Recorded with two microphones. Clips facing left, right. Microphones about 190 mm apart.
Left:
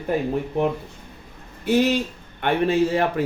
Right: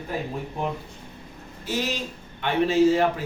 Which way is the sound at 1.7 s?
60° left (ahead or behind).